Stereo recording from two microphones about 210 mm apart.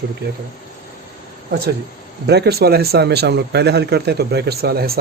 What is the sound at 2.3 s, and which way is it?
Speech, 50° right (ahead or behind).